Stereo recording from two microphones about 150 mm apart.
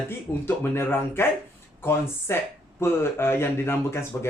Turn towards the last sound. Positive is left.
turn(degrees=15)  # may be behind; listen again after turning